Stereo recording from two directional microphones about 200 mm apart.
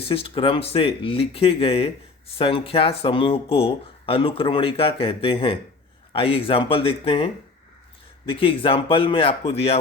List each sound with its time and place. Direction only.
0.0 s speech: 25° left (ahead or behind)
8.3 s speech: 25° left (ahead or behind)